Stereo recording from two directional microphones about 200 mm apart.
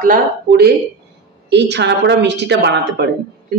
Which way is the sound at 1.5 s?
60° right (ahead or behind).